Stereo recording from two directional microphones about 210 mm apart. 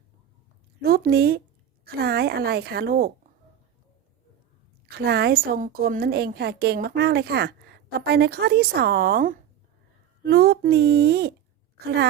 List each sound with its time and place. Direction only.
0.8 s a woman's voice: 45° right (ahead or behind)
4.9 s a woman's voice: 50° right (ahead or behind)